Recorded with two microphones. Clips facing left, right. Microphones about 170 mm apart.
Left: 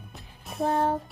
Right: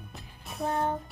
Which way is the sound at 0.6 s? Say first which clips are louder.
Left 4 dB; 30° left (ahead or behind).